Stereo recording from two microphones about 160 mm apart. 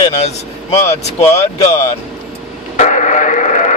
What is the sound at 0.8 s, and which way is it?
Speech, 45° left (ahead or behind).